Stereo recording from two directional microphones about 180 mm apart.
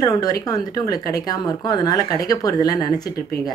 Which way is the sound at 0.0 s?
20° left (ahead or behind).